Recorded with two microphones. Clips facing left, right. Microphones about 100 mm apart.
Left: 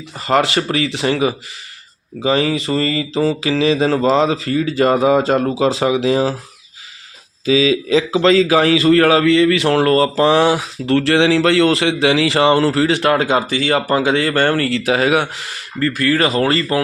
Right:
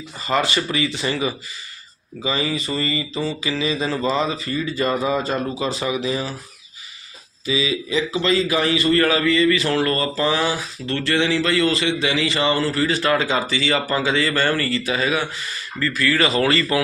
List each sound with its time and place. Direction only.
0.2 s speech: 75° left (ahead or behind)
2.2 s mantra: 70° left (ahead or behind); by 6.3 s 90° left
7.4 s a man's voice: 90° left
15.8 s speech: 50° left (ahead or behind)